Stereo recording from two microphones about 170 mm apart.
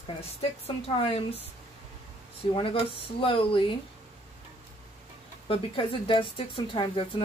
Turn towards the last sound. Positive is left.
turn(degrees=30)  # may be behind; listen again after turning